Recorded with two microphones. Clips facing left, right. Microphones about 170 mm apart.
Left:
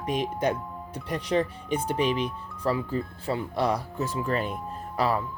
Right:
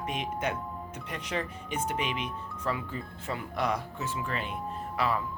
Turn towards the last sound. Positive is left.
turn(degrees=40)  # may be behind; listen again after turning